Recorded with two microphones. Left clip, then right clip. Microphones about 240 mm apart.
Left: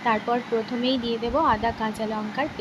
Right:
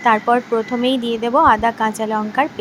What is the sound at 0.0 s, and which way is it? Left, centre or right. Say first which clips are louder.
A woman's voice: right 9 dB; right.